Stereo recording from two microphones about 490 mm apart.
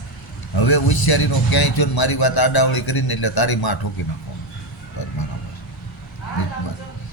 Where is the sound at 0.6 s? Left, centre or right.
Left.